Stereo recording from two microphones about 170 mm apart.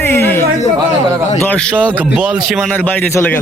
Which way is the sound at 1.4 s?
10° left (ahead or behind).